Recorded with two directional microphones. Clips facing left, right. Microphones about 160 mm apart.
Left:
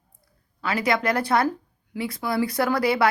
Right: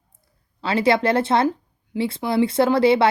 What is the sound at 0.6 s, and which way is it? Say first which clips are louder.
Speech: right 5 dB; 25° right (ahead or behind).